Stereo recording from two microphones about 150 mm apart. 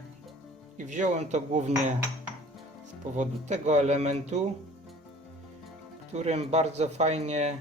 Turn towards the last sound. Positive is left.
turn(degrees=-50)  # may be behind; listen again after turning